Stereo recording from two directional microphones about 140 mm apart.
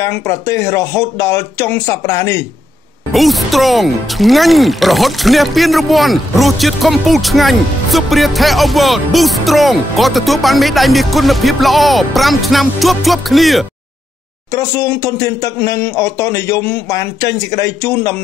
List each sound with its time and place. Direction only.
0.0 s speech: 20° left (ahead or behind)
3.1 s speech: centre (ahead or behind)
14.5 s speech: 20° left (ahead or behind)